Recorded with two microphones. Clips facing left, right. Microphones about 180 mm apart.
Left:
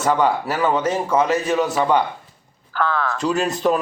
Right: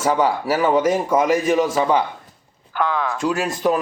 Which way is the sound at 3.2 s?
Centre (ahead or behind).